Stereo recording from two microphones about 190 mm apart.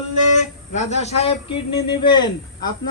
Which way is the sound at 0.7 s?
35° left (ahead or behind).